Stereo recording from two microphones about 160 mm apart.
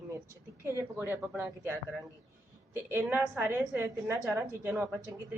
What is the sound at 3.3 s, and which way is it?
A woman's voice, 10° right (ahead or behind).